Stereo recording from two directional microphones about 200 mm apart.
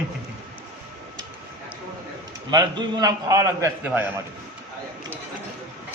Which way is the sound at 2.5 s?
20° right (ahead or behind).